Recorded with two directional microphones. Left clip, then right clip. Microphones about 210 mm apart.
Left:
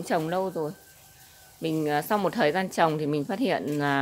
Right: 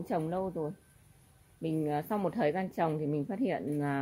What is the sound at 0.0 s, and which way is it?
Speech, 5° left (ahead or behind).